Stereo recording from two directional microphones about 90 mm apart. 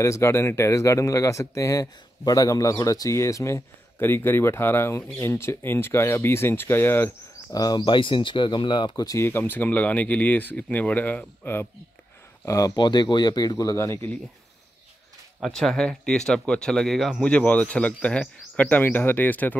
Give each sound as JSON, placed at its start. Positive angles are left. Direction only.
{"t": 0.0, "sound": "speech", "side_deg": 35}
{"t": 7.5, "sound": "speech", "side_deg": 50}
{"t": 9.2, "sound": "speech", "side_deg": 25}
{"t": 12.4, "sound": "speech", "side_deg": 40}
{"t": 12.7, "sound": "speech", "side_deg": 55}
{"t": 15.4, "sound": "speech", "side_deg": 5}
{"t": 17.2, "sound": "speech", "side_deg": 15}